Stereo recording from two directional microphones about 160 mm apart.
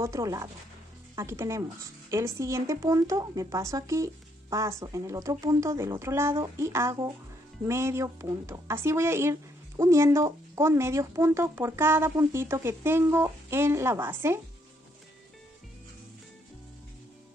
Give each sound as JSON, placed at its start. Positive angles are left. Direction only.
{"t": 0.0, "sound": "speech", "side_deg": -20}